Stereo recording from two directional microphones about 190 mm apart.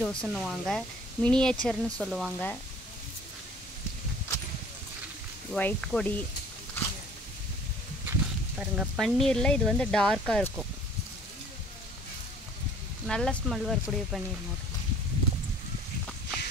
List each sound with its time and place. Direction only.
0.0 s speech: 5° left (ahead or behind)
5.5 s speech: 5° left (ahead or behind)
8.1 s speech: 5° right (ahead or behind)
13.0 s speech: 5° left (ahead or behind)